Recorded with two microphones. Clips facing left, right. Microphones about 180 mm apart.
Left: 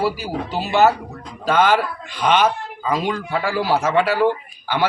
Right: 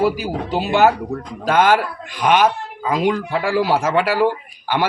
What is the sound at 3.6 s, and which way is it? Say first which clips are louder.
Speech: right 1 dB; 15° right (ahead or behind).